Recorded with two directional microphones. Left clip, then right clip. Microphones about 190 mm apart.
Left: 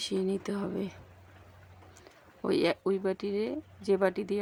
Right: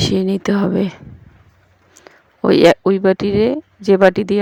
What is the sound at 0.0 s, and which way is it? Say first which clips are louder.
Speech: right 14 dB; 45° right (ahead or behind).